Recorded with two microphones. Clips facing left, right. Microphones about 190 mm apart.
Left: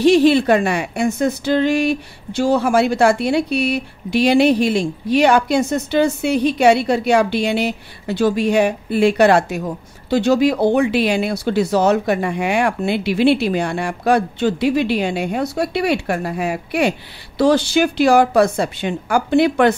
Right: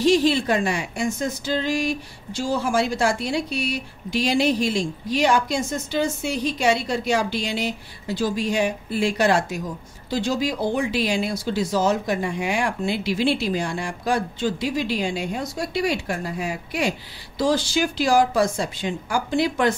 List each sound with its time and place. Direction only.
0.0 s speech: 65° left (ahead or behind)